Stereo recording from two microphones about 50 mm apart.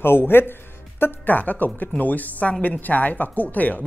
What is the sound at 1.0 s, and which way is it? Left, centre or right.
A woman's voice, left.